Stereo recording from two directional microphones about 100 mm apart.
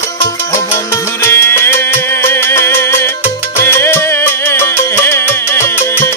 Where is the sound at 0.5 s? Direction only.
25° left (ahead or behind).